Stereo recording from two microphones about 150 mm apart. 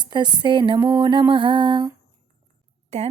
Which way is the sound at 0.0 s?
30° right (ahead or behind).